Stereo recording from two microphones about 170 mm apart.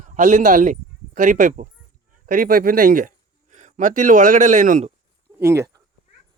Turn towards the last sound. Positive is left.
turn(degrees=-15)  # may be behind; listen again after turning